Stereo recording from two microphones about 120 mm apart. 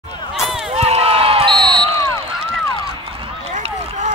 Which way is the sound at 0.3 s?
Centre (ahead or behind).